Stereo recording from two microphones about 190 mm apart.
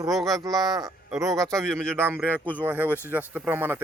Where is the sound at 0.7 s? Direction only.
20° right (ahead or behind).